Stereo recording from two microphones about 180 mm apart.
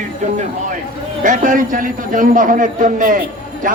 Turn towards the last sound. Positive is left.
turn(degrees=-45)  # may be behind; listen again after turning